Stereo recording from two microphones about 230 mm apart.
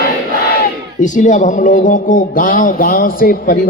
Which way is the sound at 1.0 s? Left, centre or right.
Left.